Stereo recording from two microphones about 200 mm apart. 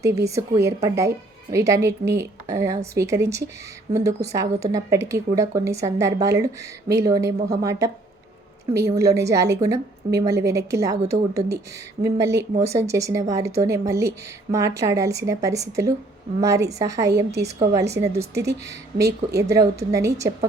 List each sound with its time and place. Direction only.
0.0 s a woman's voice: 15° right (ahead or behind)
8.9 s a woman's voice: 15° right (ahead or behind)